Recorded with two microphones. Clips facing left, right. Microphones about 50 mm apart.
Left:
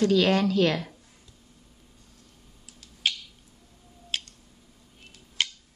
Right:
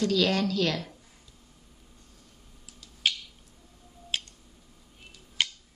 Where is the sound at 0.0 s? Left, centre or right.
Left.